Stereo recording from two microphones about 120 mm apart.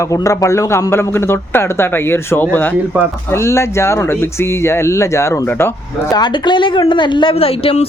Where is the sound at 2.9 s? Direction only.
15° right (ahead or behind).